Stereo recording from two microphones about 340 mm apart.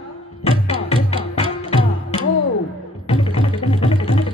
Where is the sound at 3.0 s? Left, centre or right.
Centre.